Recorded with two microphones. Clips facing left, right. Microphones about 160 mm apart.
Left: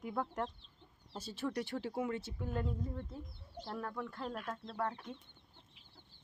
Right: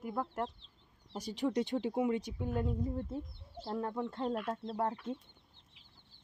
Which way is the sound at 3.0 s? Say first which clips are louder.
Right 7 dB; 30° right (ahead or behind).